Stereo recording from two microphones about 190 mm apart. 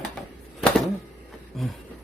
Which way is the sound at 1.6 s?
Centre (ahead or behind).